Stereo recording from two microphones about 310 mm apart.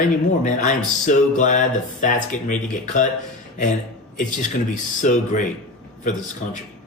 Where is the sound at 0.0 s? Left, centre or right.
Left.